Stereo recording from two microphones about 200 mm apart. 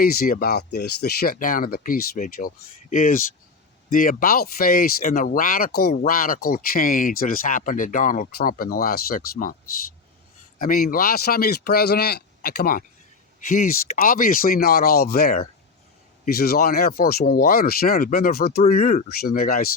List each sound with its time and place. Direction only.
0.0 s speech: 45° left (ahead or behind)
10.6 s speech: 45° left (ahead or behind)